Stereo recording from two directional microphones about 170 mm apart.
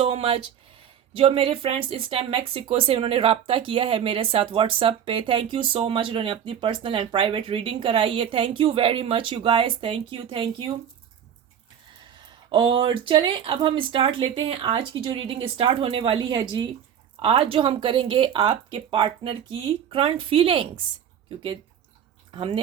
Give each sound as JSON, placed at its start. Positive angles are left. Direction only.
{"t": 0.0, "sound": "a sound", "side_deg": -35}
{"t": 1.1, "sound": "speech", "side_deg": -35}
{"t": 12.5, "sound": "speech", "side_deg": -30}